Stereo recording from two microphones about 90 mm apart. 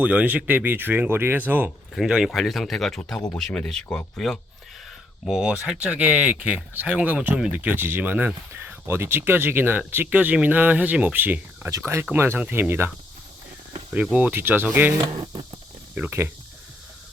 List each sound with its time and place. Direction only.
0.0 s speech: 20° right (ahead or behind)
2.0 s speech: 5° right (ahead or behind)
5.2 s speech: 10° right (ahead or behind); by 12.9 s 25° right (ahead or behind)
13.9 s speech: 15° right (ahead or behind)
16.0 s speech: 25° right (ahead or behind)